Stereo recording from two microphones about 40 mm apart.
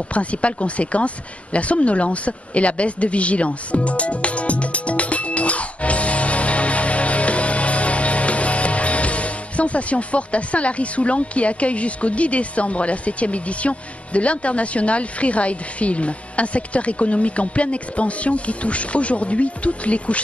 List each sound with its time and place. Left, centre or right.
0.1 s speech: left